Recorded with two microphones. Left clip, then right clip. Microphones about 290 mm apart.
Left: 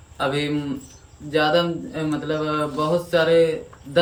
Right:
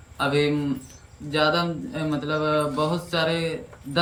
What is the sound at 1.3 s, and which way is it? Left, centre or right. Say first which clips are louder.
A man's voice: left 3 dB; centre.